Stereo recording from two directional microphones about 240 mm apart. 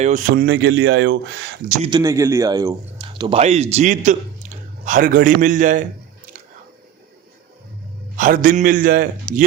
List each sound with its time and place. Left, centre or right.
0.0 s speech: right
1.8 s a man's voice: centre; by 5.8 s right
8.1 s a man's voice: right